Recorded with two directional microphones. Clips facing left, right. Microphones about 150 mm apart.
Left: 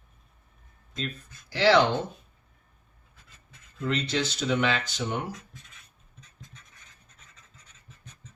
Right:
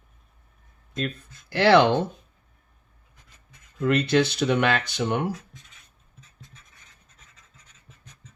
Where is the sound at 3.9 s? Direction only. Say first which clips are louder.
Right 8 dB; 60° right (ahead or behind).